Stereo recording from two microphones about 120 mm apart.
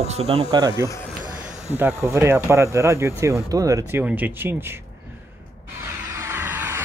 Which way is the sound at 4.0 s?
15° right (ahead or behind).